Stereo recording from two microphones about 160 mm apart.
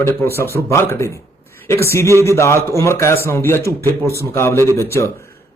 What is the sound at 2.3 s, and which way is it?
A man's voice, 15° left (ahead or behind).